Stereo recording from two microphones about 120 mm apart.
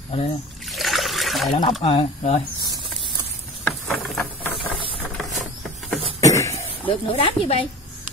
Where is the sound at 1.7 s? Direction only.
55° left (ahead or behind).